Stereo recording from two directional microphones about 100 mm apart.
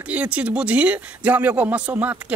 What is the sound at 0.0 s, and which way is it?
Speech, 15° right (ahead or behind).